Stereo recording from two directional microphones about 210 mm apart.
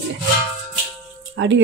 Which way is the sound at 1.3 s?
60° right (ahead or behind).